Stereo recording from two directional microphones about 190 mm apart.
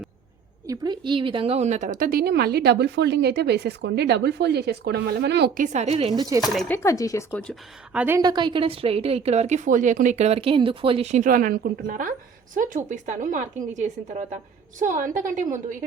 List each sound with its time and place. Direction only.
0.7 s a woman's voice: 25° right (ahead or behind); by 5.5 s 60° right (ahead or behind)
5.5 s a woman's voice: 35° right (ahead or behind); by 6.4 s 20° right (ahead or behind)
6.4 s speech: centre (ahead or behind)
6.7 s speech: 15° left (ahead or behind)
7.9 s a woman's voice: 10° right (ahead or behind)
8.2 s a woman's voice: 25° right (ahead or behind); by 15.5 s 45° right (ahead or behind)